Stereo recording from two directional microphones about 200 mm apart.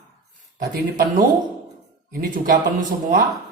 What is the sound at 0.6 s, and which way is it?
Speech, 45° right (ahead or behind).